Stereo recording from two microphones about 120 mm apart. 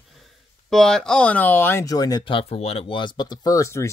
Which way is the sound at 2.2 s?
50° left (ahead or behind).